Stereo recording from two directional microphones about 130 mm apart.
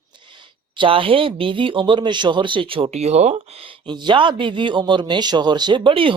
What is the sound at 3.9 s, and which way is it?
A man's voice, 35° right (ahead or behind).